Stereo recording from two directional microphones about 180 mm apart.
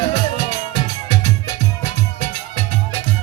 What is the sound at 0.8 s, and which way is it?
Music, 20° left (ahead or behind).